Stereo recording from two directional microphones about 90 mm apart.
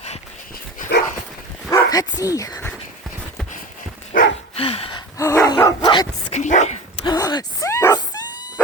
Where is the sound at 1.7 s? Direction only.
45° left (ahead or behind).